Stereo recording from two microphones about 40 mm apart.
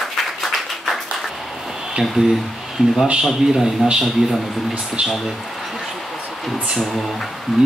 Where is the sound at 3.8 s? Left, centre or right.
Right.